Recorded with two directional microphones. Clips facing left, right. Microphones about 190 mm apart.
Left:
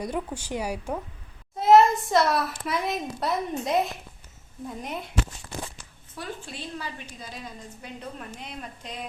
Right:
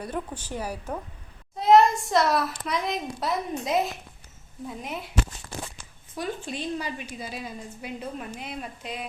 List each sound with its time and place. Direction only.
0.0 s speech: 10° left (ahead or behind)
1.5 s a child's voice: centre (ahead or behind)
6.1 s a woman's voice: 15° right (ahead or behind)